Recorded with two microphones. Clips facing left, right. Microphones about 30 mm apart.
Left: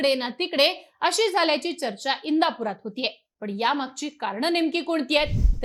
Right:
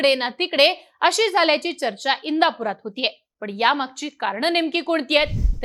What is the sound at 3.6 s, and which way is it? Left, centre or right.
A woman's voice, right.